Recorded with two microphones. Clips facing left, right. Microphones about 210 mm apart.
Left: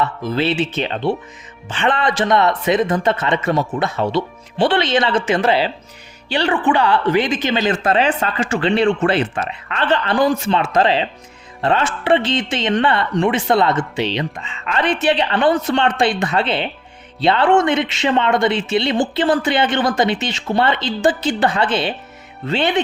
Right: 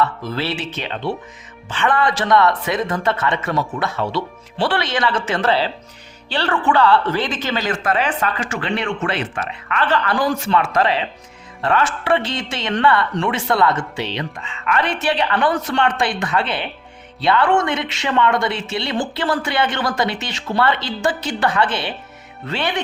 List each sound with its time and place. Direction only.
0.0 s speech: 20° left (ahead or behind)